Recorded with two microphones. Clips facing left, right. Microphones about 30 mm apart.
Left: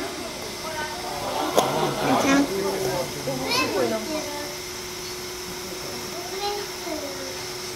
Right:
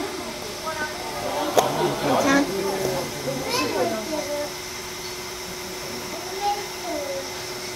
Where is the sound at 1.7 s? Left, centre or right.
Centre.